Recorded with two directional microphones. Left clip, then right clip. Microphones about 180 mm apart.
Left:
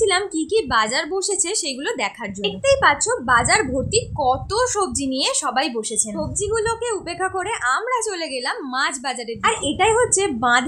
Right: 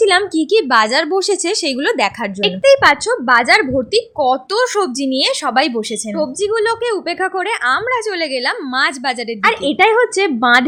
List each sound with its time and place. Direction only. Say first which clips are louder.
0.0 s speech: right 6 dB; 30° right (ahead or behind)